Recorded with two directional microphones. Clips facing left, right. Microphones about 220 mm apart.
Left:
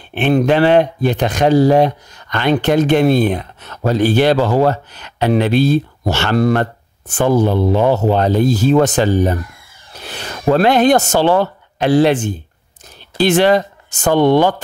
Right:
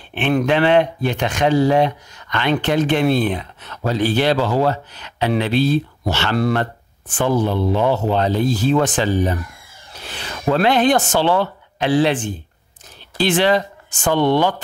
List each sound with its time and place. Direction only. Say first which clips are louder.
0.1 s speech: left 4 dB; 35° left (ahead or behind)